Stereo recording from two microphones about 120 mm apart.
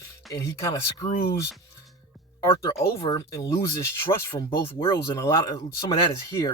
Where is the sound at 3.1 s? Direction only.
30° left (ahead or behind).